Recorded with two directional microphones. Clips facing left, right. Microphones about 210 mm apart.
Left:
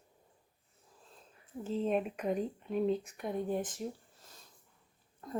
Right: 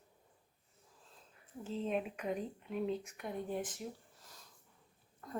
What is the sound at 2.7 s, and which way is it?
Speech, 40° left (ahead or behind).